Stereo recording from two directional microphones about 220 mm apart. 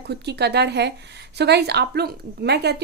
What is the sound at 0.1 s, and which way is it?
Speech, 50° right (ahead or behind).